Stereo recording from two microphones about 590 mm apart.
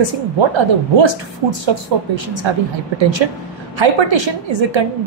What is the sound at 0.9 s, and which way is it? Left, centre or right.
Speech, right.